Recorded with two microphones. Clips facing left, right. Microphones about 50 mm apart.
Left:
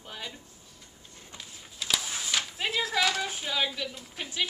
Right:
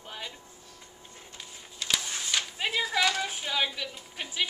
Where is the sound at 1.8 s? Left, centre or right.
Centre.